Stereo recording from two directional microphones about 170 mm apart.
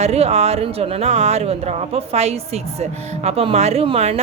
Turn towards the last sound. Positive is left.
turn(degrees=-35)  # may be behind; listen again after turning